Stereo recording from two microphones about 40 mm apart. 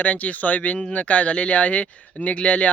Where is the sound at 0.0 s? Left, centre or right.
Left.